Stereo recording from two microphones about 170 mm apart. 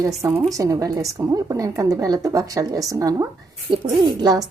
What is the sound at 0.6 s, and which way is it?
A woman's voice, 20° right (ahead or behind).